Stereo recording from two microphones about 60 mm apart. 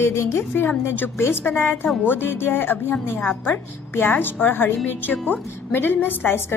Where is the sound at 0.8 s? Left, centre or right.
Left.